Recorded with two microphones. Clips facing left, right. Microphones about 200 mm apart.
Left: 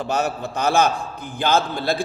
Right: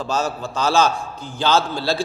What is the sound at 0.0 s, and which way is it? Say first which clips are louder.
A man's voice: even; 60° left (ahead or behind).